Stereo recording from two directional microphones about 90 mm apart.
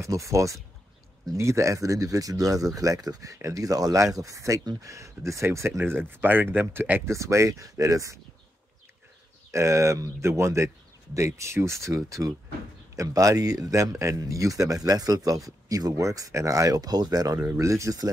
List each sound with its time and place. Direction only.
0.0 s speech: 35° right (ahead or behind)
7.1 s speech: 35° right (ahead or behind)
9.5 s speech: 35° right (ahead or behind)
17.6 s speech: 35° right (ahead or behind)